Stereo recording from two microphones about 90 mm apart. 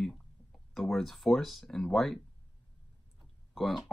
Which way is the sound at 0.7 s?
Centre (ahead or behind).